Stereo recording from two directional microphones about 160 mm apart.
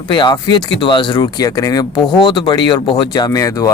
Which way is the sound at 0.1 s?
30° left (ahead or behind).